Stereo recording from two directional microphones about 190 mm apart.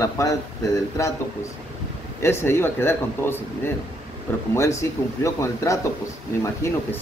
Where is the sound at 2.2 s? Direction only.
15° left (ahead or behind).